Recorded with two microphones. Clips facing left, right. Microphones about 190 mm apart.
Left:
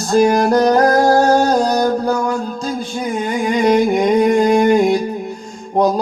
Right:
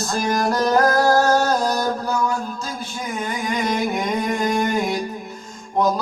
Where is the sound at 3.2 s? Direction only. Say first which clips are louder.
Left 8 dB; 50° left (ahead or behind).